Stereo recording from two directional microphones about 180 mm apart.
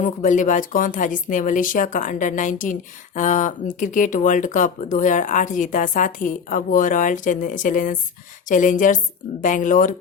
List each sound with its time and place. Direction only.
0.0 s speech: 45° left (ahead or behind)